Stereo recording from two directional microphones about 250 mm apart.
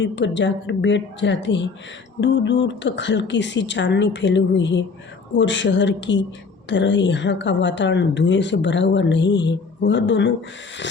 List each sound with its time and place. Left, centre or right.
0.0 s a woman's voice: left